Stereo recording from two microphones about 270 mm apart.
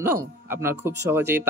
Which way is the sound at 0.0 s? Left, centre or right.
Centre.